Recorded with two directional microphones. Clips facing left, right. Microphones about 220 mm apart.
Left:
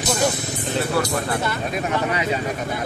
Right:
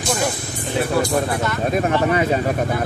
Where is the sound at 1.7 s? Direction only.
45° right (ahead or behind).